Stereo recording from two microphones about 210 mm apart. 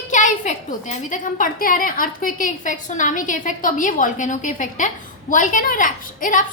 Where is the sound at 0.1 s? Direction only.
35° left (ahead or behind).